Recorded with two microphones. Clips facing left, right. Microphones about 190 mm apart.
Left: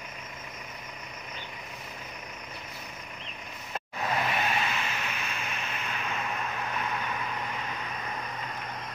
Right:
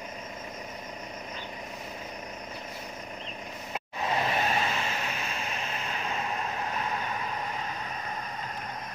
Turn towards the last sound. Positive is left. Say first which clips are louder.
# right 1 dB
turn(degrees=-35)  # may be behind; listen again after turning